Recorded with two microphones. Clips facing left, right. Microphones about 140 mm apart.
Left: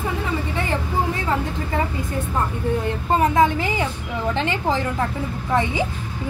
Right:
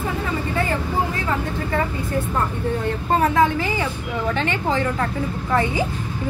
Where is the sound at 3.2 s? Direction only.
20° left (ahead or behind).